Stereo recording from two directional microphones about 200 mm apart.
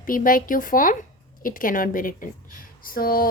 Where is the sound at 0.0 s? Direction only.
45° left (ahead or behind).